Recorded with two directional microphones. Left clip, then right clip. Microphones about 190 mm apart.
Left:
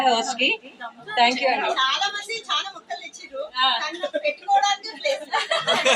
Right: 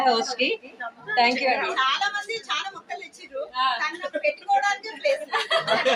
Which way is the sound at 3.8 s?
Centre (ahead or behind).